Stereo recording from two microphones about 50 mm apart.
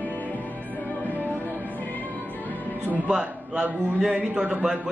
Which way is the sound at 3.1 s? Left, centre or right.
Centre.